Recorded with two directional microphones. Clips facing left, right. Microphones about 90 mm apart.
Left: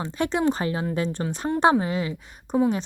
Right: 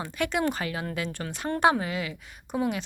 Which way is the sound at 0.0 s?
30° left (ahead or behind).